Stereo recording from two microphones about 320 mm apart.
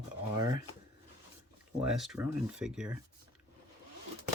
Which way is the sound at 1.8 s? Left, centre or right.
Centre.